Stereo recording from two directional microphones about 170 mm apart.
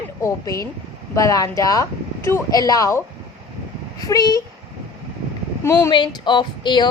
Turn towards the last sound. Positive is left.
turn(degrees=25)  # may be behind; listen again after turning